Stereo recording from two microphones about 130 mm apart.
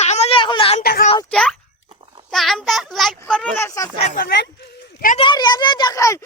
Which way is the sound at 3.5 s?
20° left (ahead or behind).